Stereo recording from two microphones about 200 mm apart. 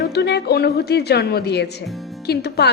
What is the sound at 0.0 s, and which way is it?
A woman's voice, 55° left (ahead or behind).